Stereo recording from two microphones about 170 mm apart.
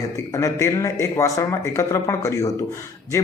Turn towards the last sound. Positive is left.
turn(degrees=15)  # may be behind; listen again after turning